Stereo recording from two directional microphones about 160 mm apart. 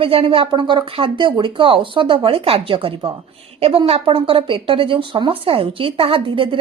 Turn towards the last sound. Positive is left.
turn(degrees=-35)  # may be behind; listen again after turning